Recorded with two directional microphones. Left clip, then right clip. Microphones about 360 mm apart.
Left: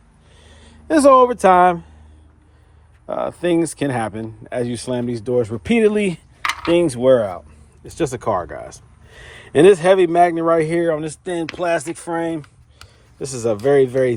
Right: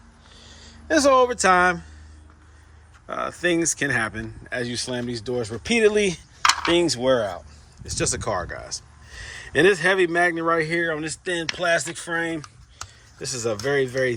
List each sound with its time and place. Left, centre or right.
0.3 s speech: centre
3.1 s speech: centre
11.7 s speech: left
12.1 s speech: centre